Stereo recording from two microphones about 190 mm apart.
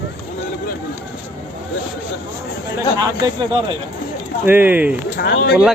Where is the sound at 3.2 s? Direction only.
20° right (ahead or behind).